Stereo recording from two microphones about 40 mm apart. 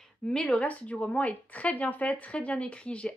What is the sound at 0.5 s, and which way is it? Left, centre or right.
Speech, left.